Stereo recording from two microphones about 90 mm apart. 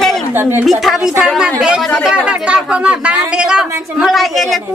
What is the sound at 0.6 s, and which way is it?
Speech, centre (ahead or behind).